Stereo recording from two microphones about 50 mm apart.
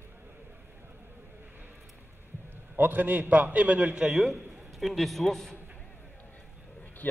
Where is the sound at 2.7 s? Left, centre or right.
Right; by 4.2 s centre.